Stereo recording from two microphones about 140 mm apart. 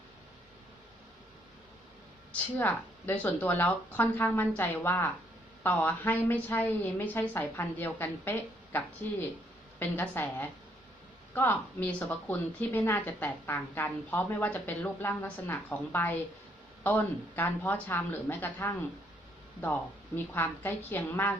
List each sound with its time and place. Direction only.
2.3 s a woman's voice: 15° left (ahead or behind)
20.1 s a woman's voice: 15° left (ahead or behind)